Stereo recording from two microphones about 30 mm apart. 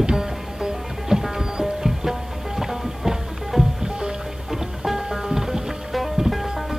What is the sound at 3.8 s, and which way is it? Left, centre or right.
Music, right.